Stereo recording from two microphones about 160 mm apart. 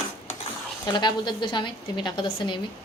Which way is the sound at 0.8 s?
30° left (ahead or behind).